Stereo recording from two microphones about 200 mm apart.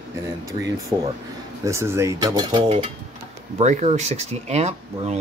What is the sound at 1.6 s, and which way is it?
Speech, 15° right (ahead or behind).